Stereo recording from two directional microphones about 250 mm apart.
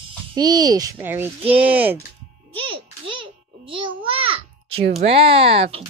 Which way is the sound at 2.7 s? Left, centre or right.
Right.